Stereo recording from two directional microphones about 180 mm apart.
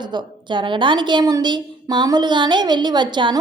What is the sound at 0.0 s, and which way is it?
A woman's voice, 25° right (ahead or behind).